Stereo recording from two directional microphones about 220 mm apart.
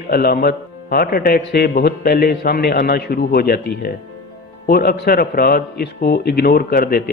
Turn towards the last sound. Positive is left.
turn(degrees=45)  # may be behind; listen again after turning